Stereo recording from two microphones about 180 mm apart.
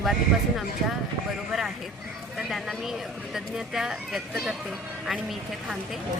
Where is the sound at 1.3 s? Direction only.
Centre (ahead or behind).